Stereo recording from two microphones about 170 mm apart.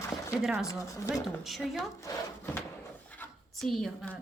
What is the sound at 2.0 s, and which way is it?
Speech, 15° left (ahead or behind).